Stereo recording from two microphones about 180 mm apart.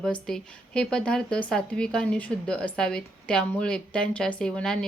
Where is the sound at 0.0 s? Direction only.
5° left (ahead or behind).